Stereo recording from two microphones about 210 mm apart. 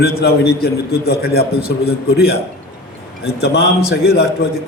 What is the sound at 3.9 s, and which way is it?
Speech, 50° left (ahead or behind).